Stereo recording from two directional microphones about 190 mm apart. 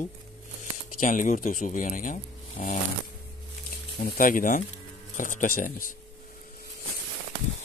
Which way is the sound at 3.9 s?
50° left (ahead or behind).